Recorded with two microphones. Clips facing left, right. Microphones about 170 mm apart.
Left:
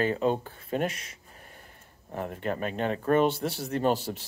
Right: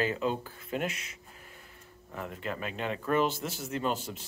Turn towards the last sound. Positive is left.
turn(degrees=35)  # may be behind; listen again after turning